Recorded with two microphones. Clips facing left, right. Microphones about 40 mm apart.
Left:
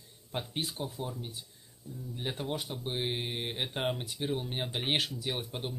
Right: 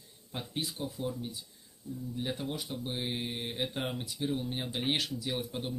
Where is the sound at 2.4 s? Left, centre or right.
Left.